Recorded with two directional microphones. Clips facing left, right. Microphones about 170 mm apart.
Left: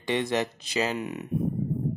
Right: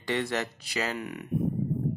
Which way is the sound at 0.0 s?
20° left (ahead or behind).